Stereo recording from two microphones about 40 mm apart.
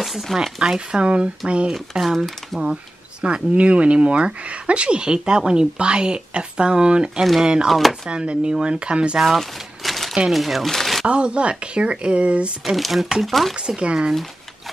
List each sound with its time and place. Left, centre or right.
0.0 s speech: centre
0.6 s speech: centre
1.7 s speech: centre
2.1 s speech: centre
3.2 s speech: right
7.6 s speech: centre
8.1 s speech: right
9.4 s a sound: centre
10.2 s speech: centre
10.7 s a sound: centre
11.1 s speech: right
12.6 s speech: centre
13.6 s speech: right